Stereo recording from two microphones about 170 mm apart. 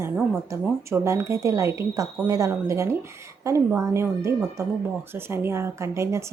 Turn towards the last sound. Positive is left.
turn(degrees=-15)  # may be behind; listen again after turning